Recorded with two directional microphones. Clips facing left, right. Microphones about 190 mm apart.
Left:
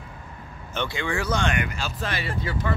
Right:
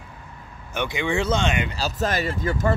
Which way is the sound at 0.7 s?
20° right (ahead or behind).